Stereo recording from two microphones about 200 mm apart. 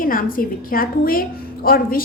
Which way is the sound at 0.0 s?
45° left (ahead or behind).